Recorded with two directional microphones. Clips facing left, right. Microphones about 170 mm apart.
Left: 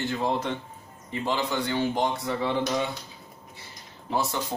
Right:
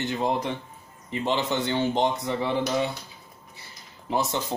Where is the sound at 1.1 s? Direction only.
20° right (ahead or behind).